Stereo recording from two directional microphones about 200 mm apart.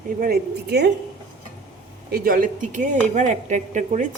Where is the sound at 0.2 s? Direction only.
50° right (ahead or behind).